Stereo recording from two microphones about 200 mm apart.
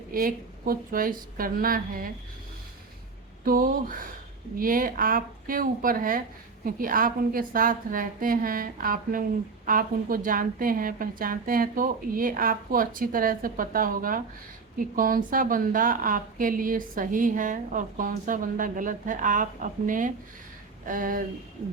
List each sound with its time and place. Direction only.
0.1 s a woman's voice: 45° right (ahead or behind)
3.4 s a woman's voice: 45° right (ahead or behind)